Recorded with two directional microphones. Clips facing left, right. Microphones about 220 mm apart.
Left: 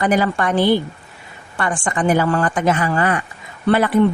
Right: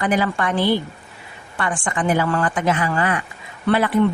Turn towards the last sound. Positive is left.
turn(degrees=40)  # may be behind; listen again after turning